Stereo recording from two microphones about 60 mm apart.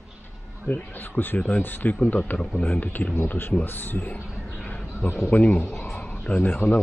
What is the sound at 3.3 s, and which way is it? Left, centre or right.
Speech, left.